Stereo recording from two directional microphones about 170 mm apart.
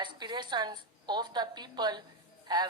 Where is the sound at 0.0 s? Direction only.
25° right (ahead or behind).